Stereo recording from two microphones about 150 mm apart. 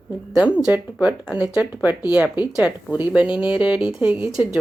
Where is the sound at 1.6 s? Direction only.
25° left (ahead or behind).